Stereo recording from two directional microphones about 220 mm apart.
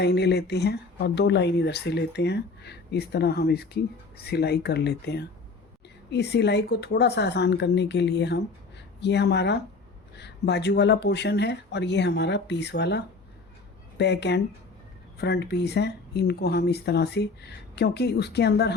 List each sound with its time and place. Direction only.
0.0 s speech: 50° left (ahead or behind)
14.0 s speech: 50° left (ahead or behind)